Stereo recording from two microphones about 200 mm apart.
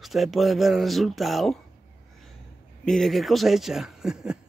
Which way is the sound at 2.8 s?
Centre (ahead or behind).